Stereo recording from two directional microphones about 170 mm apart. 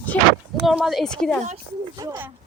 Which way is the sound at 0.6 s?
Centre (ahead or behind).